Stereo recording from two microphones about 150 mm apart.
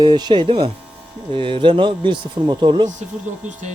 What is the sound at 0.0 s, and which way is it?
Speech, 30° right (ahead or behind).